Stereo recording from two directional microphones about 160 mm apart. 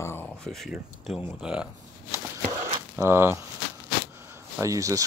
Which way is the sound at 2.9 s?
15° right (ahead or behind).